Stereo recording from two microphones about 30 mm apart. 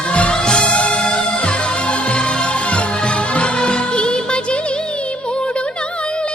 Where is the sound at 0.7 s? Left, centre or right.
Left.